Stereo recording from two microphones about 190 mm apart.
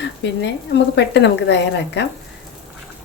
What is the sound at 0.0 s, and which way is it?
Speech, 65° left (ahead or behind).